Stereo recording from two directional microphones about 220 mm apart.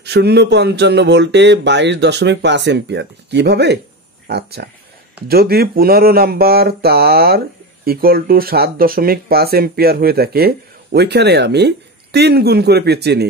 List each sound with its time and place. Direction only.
0.0 s speech: 50° right (ahead or behind)